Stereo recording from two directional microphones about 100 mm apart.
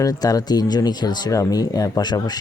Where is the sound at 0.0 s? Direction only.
40° left (ahead or behind).